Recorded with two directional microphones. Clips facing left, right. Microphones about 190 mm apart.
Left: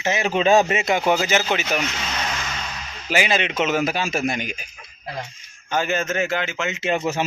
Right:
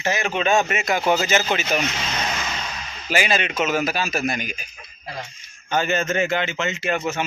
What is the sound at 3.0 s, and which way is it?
Speech, 15° left (ahead or behind).